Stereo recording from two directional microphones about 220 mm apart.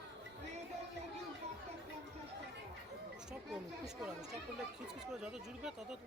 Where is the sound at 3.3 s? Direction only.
5° right (ahead or behind).